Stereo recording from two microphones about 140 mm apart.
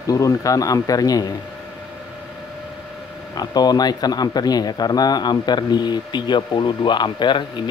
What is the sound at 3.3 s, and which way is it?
Speech, 30° left (ahead or behind).